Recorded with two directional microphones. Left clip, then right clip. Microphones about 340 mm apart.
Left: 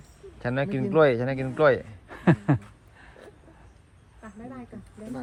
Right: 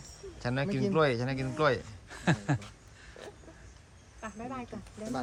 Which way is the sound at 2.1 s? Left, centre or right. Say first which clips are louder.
Left 7 dB; centre.